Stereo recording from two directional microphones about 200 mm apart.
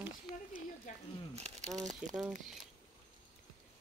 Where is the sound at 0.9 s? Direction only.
40° left (ahead or behind).